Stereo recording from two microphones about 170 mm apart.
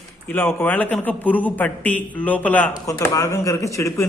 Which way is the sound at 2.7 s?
20° left (ahead or behind).